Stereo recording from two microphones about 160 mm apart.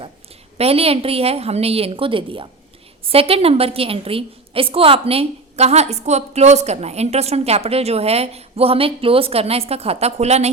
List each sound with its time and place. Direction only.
0.6 s a woman's voice: 40° right (ahead or behind)